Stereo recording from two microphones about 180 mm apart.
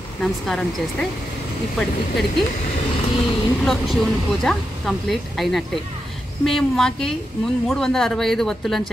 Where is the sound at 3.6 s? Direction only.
Centre (ahead or behind).